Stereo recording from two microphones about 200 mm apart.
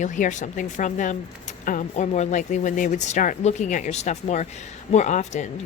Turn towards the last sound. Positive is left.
turn(degrees=35)  # may be behind; listen again after turning